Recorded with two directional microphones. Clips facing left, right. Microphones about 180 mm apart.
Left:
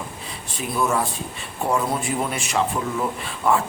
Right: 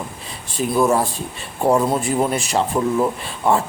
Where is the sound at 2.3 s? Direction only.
35° right (ahead or behind).